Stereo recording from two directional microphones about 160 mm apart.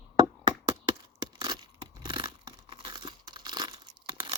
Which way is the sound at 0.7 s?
30° right (ahead or behind).